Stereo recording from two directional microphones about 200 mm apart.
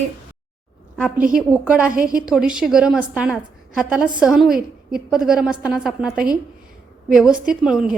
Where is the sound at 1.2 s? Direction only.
45° right (ahead or behind).